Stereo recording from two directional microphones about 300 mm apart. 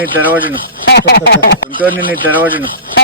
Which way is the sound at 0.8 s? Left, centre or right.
Left.